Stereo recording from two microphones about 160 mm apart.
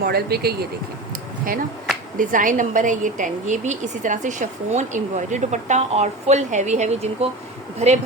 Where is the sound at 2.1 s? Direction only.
55° right (ahead or behind).